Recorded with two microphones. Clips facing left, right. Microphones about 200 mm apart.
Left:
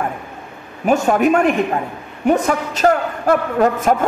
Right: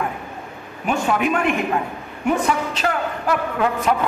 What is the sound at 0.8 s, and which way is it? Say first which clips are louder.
A man's voice: left 6 dB; 45° left (ahead or behind).